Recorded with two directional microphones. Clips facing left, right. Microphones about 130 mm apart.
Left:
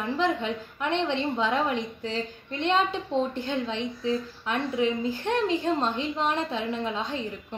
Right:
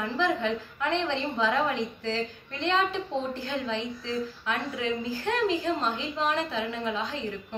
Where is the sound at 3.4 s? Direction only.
25° left (ahead or behind).